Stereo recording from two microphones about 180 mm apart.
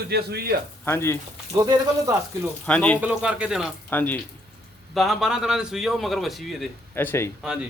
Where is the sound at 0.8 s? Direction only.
15° left (ahead or behind).